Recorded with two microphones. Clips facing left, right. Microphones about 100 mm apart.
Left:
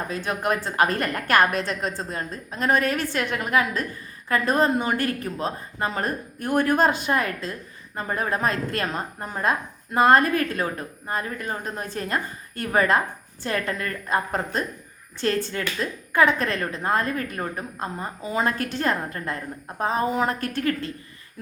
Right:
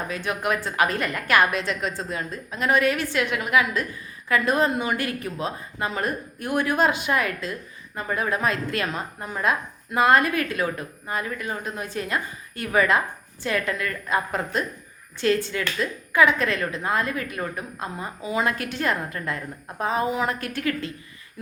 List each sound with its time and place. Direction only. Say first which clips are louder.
0.1 s a woman's voice: left 1 dB; 35° left (ahead or behind)